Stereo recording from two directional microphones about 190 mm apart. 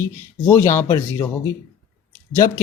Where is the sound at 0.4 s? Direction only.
15° left (ahead or behind).